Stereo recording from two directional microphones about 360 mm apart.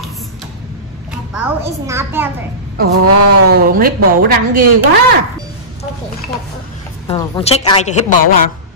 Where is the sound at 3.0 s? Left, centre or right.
Right.